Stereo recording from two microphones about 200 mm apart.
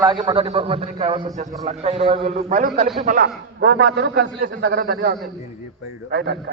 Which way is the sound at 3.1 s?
45° right (ahead or behind).